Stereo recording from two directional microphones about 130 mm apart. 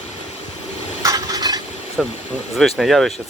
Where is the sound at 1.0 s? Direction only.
25° right (ahead or behind).